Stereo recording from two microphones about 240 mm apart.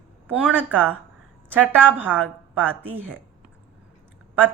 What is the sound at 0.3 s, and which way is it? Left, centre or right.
A woman's voice, centre.